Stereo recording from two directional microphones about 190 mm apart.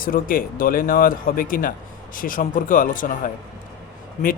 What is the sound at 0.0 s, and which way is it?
Speech, 45° left (ahead or behind).